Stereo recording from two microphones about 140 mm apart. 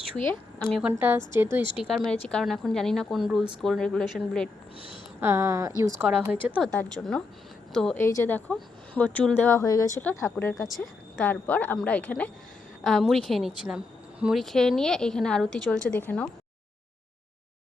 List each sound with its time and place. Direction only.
0.2 s a woman's voice: 5° left (ahead or behind)
0.9 s a woman's voice: 15° right (ahead or behind)
1.9 s a woman's voice: 5° left (ahead or behind)
5.2 s a woman's voice: 20° right (ahead or behind)
6.6 s a woman's voice: 5° left (ahead or behind)
7.9 s speech: 20° left (ahead or behind)
10.8 s a woman's voice: centre (ahead or behind)